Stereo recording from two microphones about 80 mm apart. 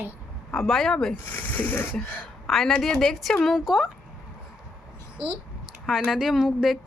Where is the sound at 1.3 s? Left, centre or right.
Left.